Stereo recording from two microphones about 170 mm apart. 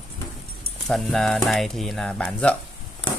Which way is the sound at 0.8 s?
Centre (ahead or behind).